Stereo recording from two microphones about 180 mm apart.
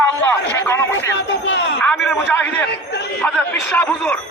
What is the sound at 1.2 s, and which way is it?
Speech, 70° left (ahead or behind).